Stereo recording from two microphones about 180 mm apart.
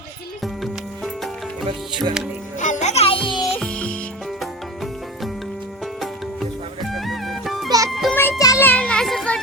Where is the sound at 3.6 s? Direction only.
5° left (ahead or behind).